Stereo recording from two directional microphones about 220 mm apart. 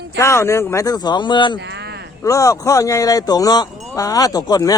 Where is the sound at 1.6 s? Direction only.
50° right (ahead or behind).